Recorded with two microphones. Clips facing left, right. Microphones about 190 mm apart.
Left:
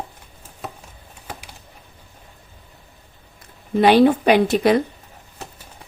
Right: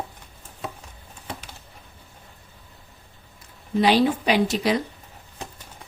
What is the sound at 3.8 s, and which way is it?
A woman's voice, 55° left (ahead or behind).